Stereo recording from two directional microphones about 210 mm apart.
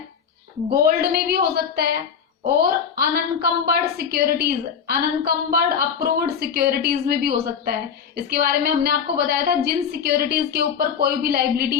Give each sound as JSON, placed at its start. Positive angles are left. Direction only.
{"t": 0.7, "sound": "a woman's voice", "side_deg": -45}